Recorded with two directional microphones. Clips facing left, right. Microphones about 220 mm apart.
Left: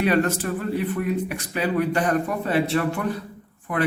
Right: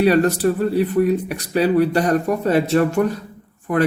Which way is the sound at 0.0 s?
35° right (ahead or behind).